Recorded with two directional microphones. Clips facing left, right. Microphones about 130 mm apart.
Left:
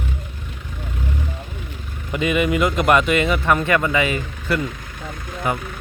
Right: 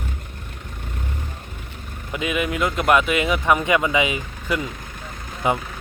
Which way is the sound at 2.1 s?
Centre (ahead or behind).